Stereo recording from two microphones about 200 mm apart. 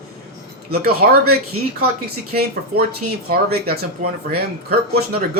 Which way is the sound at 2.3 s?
50° right (ahead or behind).